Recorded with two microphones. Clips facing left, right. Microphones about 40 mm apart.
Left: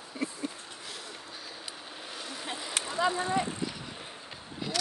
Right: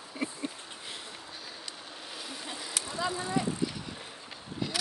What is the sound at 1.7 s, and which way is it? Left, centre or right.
Vehicle, centre.